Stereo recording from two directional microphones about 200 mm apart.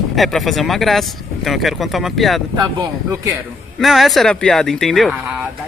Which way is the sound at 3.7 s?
Centre (ahead or behind).